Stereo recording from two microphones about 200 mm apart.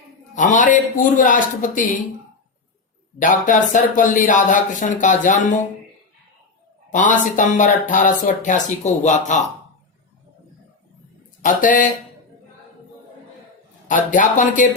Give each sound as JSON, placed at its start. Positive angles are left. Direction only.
{"t": 0.3, "sound": "speech", "side_deg": 40}
{"t": 3.2, "sound": "speech", "side_deg": 40}
{"t": 6.9, "sound": "speech", "side_deg": 40}
{"t": 11.4, "sound": "speech", "side_deg": 40}
{"t": 13.8, "sound": "speech", "side_deg": 40}